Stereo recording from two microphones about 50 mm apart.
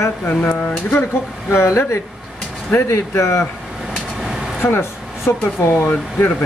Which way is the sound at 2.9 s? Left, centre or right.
Left.